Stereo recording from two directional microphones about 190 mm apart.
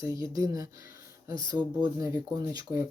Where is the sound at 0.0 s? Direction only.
15° right (ahead or behind).